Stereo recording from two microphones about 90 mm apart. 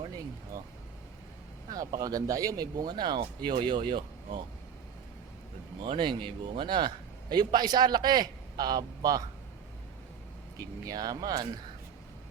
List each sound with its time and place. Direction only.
1.7 s a man's voice: 40° right (ahead or behind)
3.2 s speech: 65° right (ahead or behind)
5.8 s a man's voice: 65° right (ahead or behind); by 9.2 s 45° right (ahead or behind)
10.6 s a man's voice: 45° right (ahead or behind)